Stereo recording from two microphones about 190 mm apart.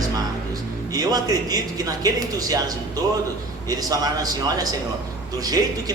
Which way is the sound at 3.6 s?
20° right (ahead or behind).